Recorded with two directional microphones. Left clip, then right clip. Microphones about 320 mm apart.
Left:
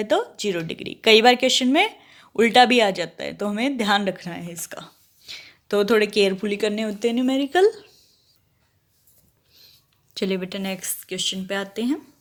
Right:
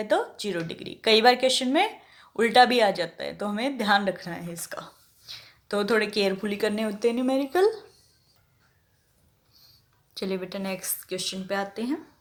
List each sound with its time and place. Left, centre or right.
0.3 s speech: left
10.2 s speech: left